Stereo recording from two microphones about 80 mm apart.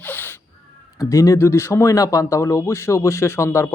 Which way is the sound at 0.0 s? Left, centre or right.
Left.